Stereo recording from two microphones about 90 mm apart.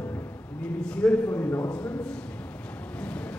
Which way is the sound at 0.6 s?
10° left (ahead or behind).